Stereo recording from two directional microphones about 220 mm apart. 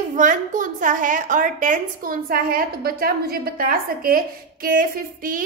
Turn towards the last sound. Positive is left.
turn(degrees=-40)  # may be behind; listen again after turning